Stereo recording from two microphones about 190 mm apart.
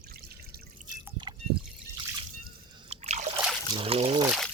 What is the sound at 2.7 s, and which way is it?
Liquid, 35° right (ahead or behind).